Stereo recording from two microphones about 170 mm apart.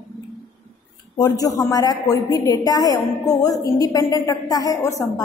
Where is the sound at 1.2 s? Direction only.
20° left (ahead or behind).